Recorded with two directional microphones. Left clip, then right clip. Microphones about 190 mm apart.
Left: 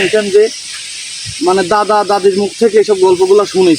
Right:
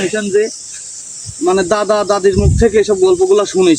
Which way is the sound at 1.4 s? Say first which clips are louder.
Left 2 dB; 25° right (ahead or behind).